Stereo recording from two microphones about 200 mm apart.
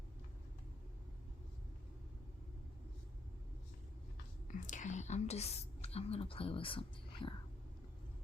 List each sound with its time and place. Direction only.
4.4 s speech: 40° left (ahead or behind)